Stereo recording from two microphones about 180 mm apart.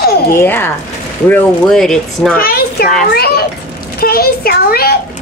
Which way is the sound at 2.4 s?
55° left (ahead or behind).